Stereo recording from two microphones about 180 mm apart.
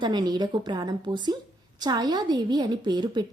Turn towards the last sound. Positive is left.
turn(degrees=-25)  # may be behind; listen again after turning